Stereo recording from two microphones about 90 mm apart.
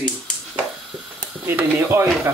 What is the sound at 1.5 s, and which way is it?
Speech, 20° right (ahead or behind).